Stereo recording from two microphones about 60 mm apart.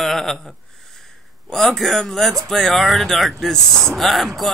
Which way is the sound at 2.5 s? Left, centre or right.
Centre.